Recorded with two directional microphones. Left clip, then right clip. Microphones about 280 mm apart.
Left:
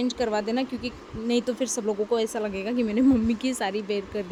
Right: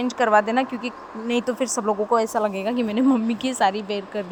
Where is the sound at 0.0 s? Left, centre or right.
Centre.